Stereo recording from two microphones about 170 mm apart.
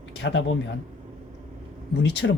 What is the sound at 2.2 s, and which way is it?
Speech, 90° left.